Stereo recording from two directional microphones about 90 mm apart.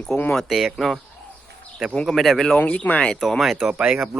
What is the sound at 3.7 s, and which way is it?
Speech, 15° right (ahead or behind).